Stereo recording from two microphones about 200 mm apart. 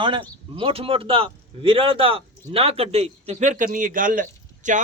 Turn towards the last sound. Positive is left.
turn(degrees=-40)  # may be behind; listen again after turning